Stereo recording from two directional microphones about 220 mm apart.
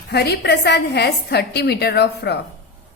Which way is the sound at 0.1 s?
50° left (ahead or behind).